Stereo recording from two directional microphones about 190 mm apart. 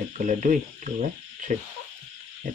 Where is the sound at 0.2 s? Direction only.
45° right (ahead or behind).